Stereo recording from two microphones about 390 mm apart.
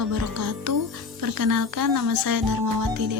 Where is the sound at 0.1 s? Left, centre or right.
Right.